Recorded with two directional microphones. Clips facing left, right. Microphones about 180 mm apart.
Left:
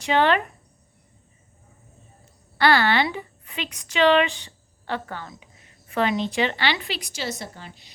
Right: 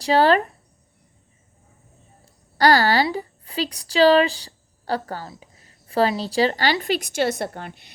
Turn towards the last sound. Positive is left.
turn(degrees=-60)  # may be behind; listen again after turning